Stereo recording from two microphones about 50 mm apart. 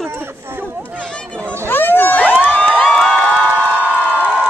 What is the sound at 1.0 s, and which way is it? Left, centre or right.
Chatter, centre.